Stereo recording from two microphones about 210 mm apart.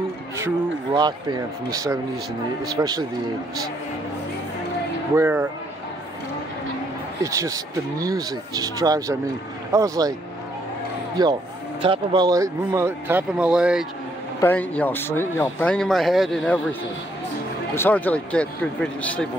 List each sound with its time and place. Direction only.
0.9 s speech: 20° right (ahead or behind)
5.1 s speech: 10° right (ahead or behind)
7.2 s speech: 15° right (ahead or behind)
11.2 s speech: 20° right (ahead or behind)
14.4 s speech: 10° left (ahead or behind)
17.7 s speech: 10° left (ahead or behind)